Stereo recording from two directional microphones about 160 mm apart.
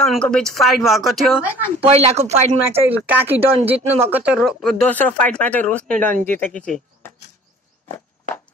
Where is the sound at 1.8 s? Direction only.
40° right (ahead or behind).